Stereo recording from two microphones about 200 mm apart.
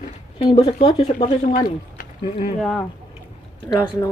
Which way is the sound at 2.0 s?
45° left (ahead or behind).